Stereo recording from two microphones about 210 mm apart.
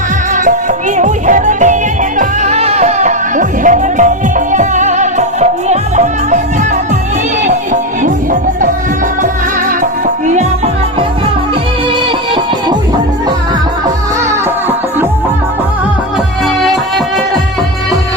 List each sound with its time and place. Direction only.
0.9 s music: 35° right (ahead or behind)
7.4 s music: 35° right (ahead or behind)